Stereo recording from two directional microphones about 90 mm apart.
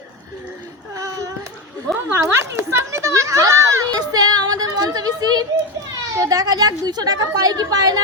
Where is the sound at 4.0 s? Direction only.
45° right (ahead or behind).